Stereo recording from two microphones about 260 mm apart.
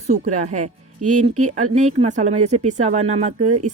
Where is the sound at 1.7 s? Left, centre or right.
Right.